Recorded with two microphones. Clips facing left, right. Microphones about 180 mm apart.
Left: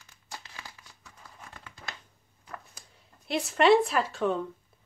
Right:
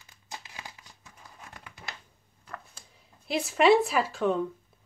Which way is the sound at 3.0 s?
Centre (ahead or behind).